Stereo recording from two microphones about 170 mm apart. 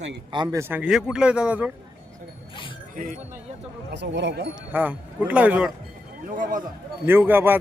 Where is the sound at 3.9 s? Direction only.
90° right.